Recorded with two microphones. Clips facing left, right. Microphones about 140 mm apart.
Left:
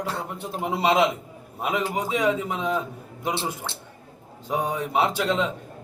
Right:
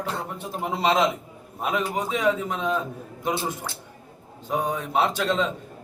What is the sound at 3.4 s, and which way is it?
Speech, 25° left (ahead or behind).